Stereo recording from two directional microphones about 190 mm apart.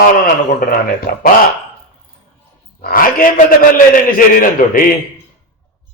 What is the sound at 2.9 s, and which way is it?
Speech, 45° left (ahead or behind).